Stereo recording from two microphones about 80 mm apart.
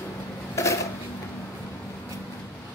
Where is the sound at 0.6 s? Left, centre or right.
Left.